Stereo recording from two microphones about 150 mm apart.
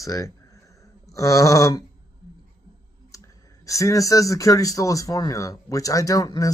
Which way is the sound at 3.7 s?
20° left (ahead or behind).